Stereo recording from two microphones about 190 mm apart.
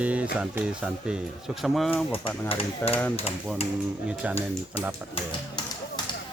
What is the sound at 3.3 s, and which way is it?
Speech, 35° left (ahead or behind).